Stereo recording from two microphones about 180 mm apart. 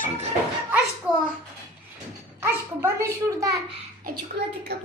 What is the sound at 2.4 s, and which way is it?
A child's voice, 15° right (ahead or behind).